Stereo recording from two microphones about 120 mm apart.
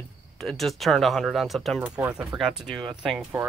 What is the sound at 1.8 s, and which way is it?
Speech, 10° right (ahead or behind).